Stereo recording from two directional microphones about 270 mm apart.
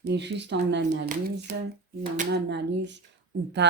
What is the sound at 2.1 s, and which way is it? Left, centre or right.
Speech, right.